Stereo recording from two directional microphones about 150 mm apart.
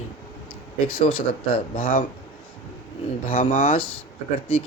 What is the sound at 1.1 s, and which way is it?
Speech, 35° left (ahead or behind).